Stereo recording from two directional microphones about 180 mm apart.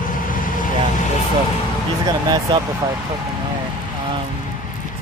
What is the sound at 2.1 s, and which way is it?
Speech, 20° right (ahead or behind).